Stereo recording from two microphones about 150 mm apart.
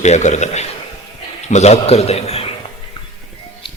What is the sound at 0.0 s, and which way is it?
A man's voice, 50° left (ahead or behind).